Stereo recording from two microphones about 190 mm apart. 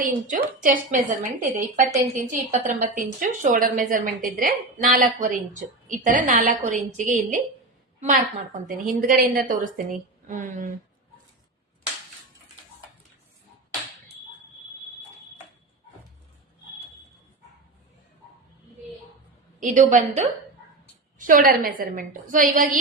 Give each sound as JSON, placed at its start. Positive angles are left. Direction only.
{"t": 0.0, "sound": "a woman's voice", "side_deg": -45}
{"t": 8.6, "sound": "a woman's voice", "side_deg": -45}
{"t": 19.5, "sound": "a woman's voice", "side_deg": -45}